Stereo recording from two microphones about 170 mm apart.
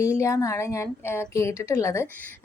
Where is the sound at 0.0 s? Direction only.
20° left (ahead or behind).